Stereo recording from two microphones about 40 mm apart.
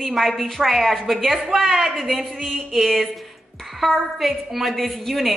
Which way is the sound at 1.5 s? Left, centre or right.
Centre.